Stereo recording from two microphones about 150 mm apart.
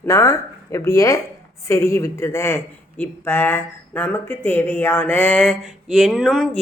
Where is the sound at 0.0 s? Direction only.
20° left (ahead or behind).